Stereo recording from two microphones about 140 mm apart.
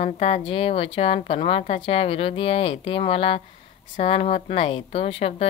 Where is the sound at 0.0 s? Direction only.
50° left (ahead or behind).